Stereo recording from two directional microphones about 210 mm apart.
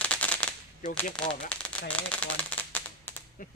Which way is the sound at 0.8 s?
35° left (ahead or behind).